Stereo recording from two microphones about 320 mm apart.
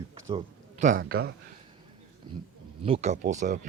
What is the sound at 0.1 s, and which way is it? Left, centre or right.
Speech, centre.